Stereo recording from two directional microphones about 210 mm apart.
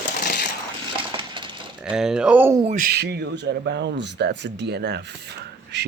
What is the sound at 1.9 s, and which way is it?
Speech, 5° right (ahead or behind).